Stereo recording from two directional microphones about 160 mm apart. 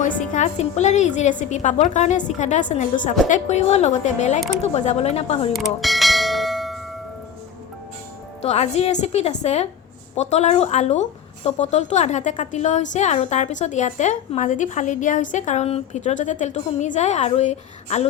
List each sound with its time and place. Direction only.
0.0 s a woman's voice: 50° left (ahead or behind)
5.5 s church bell: centre (ahead or behind)
8.4 s a woman's voice: 45° left (ahead or behind)